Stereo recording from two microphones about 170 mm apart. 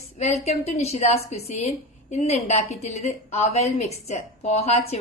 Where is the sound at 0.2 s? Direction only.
40° left (ahead or behind).